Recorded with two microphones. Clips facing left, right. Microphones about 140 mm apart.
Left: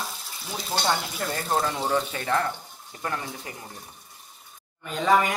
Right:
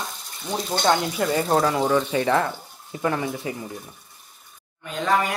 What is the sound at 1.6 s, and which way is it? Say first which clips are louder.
Speech: right 5 dB; 90° right.